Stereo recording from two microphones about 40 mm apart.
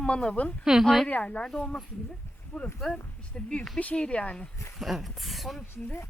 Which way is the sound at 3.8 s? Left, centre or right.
Left.